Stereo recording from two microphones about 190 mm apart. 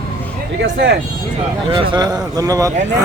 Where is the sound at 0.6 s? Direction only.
65° right (ahead or behind).